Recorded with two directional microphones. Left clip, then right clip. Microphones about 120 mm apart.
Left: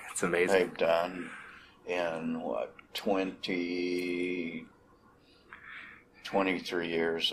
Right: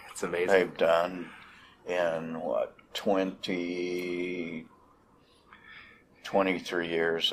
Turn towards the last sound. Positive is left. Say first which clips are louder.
# right 2 dB
turn(degrees=-40)  # may be behind; listen again after turning